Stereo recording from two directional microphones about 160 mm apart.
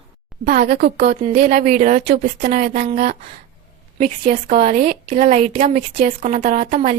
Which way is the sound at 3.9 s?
55° right (ahead or behind).